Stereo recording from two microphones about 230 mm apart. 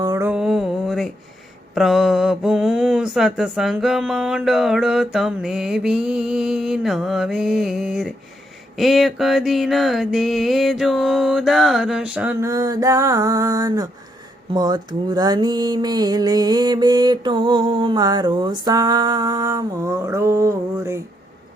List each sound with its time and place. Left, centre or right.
0.0 s mantra: centre
1.7 s speech: centre
14.5 s a sound: centre